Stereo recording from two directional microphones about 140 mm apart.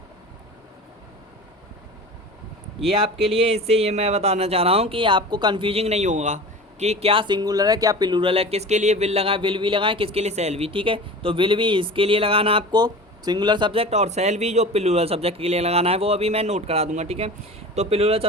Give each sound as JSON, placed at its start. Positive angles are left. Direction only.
{"t": 2.8, "sound": "speech", "side_deg": -40}